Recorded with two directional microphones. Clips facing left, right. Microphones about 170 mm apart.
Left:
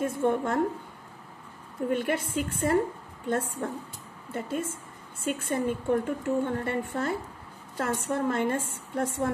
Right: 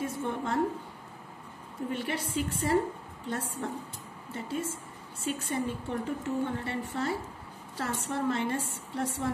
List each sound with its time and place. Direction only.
0.0 s a woman's voice: 55° left (ahead or behind)
1.9 s a woman's voice: 50° left (ahead or behind)